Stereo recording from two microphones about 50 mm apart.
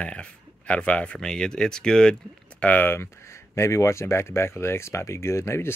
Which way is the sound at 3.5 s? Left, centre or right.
Left.